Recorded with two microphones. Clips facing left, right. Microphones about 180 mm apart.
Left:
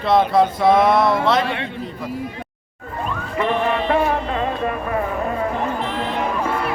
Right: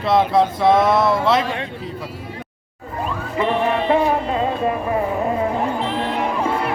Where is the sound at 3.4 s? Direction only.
20° right (ahead or behind).